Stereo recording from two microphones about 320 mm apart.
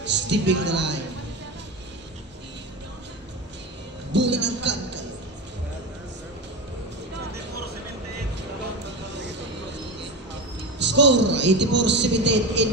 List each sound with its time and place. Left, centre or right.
0.0 s a woman's voice: right
4.1 s a sound: right
9.1 s vehicle: right
10.8 s a man's voice: right